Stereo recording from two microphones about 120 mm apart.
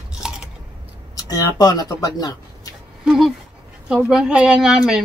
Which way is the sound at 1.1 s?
30° left (ahead or behind).